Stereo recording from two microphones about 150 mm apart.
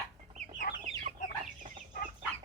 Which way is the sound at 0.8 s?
45° right (ahead or behind).